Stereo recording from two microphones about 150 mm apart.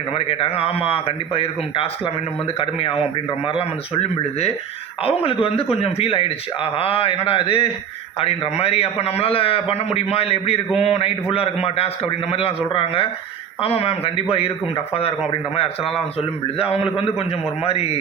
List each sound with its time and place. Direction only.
0.1 s a man's voice: 40° left (ahead or behind)
3.6 s a man's voice: 40° left (ahead or behind)